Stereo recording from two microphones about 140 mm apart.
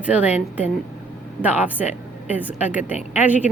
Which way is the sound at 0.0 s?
10° right (ahead or behind).